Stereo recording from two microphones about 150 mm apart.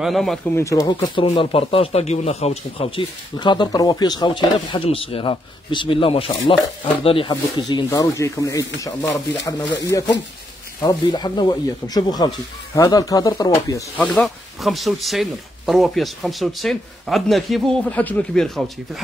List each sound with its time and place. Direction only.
0.0 s speech: centre (ahead or behind)
0.6 s speech: 20° left (ahead or behind)
13.9 s speech: 10° left (ahead or behind)